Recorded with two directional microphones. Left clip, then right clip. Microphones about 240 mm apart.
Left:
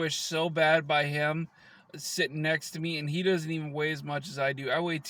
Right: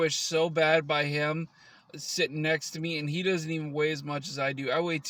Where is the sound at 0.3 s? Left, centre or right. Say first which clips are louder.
Left 1 dB; centre.